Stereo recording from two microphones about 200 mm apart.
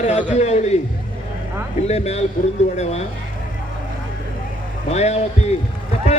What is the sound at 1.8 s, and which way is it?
A man's voice, 30° left (ahead or behind).